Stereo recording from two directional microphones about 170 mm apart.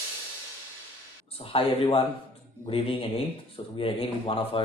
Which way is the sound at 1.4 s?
35° left (ahead or behind).